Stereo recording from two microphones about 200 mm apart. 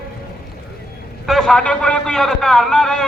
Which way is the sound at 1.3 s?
Centre (ahead or behind).